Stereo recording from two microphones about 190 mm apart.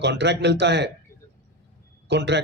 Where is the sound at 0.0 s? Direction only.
65° right (ahead or behind).